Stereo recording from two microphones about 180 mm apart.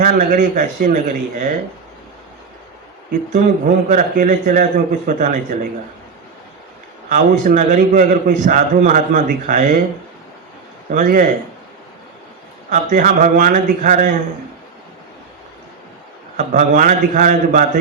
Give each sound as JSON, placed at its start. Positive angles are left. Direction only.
{"t": 0.0, "sound": "a man's voice", "side_deg": -45}
{"t": 3.3, "sound": "a man's voice", "side_deg": -45}
{"t": 7.1, "sound": "a man's voice", "side_deg": -45}
{"t": 10.9, "sound": "a man's voice", "side_deg": -45}
{"t": 12.7, "sound": "a man's voice", "side_deg": -45}
{"t": 16.4, "sound": "a man's voice", "side_deg": -45}